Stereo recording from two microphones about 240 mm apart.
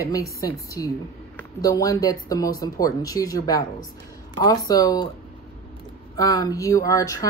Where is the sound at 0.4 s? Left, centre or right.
Centre.